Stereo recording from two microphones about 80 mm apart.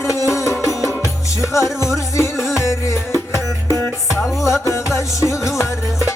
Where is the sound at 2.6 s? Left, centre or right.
Left.